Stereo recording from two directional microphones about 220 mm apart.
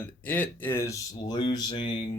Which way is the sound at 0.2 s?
10° left (ahead or behind).